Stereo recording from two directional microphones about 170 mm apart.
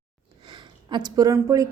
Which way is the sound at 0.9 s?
25° right (ahead or behind).